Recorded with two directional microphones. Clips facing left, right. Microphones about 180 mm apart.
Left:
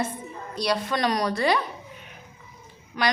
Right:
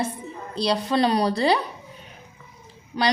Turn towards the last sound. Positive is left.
turn(degrees=-30)  # may be behind; listen again after turning